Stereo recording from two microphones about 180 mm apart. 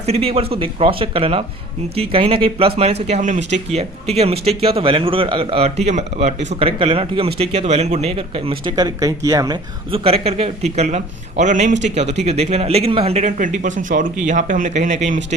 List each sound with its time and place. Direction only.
0.0 s a man's voice: 35° right (ahead or behind)